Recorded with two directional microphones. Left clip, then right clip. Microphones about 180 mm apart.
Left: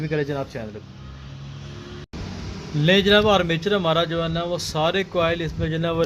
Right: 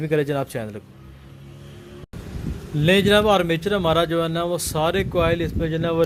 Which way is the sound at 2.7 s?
30° right (ahead or behind).